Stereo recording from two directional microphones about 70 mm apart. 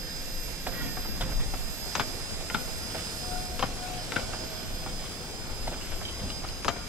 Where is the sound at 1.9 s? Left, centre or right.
Centre.